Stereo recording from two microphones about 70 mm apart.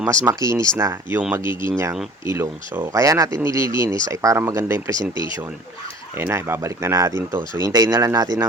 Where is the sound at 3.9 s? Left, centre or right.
Right.